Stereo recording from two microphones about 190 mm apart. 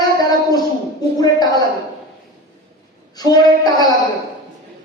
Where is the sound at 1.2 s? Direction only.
20° left (ahead or behind).